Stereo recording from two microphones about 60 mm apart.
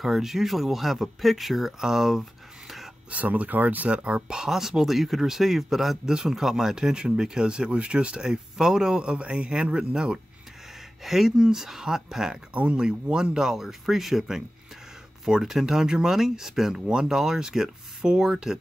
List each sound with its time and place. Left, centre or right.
0.0 s speech: centre
3.1 s speech: right
11.1 s speech: centre
12.5 s speech: right
12.8 s speech: centre